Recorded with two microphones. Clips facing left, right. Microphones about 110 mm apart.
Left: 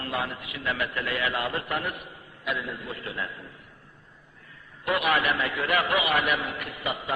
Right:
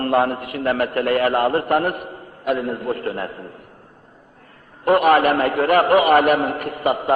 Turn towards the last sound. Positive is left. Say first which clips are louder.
# right 12 dB
turn(degrees=-45)  # may be behind; listen again after turning